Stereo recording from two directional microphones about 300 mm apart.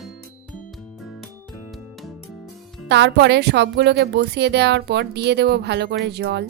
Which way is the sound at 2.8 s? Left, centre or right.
Right.